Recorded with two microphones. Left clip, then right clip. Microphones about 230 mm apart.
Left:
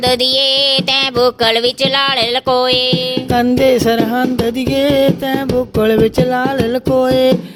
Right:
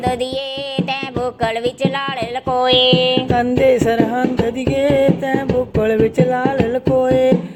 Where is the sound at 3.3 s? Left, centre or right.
Left.